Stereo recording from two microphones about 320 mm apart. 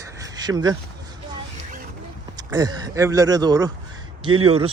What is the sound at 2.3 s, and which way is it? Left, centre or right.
Speech, centre.